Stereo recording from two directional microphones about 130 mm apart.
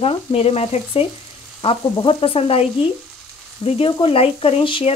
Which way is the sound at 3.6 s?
45° left (ahead or behind).